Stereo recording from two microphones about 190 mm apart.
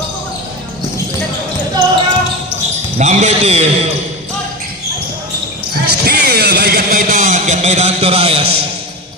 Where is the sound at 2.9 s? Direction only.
35° right (ahead or behind).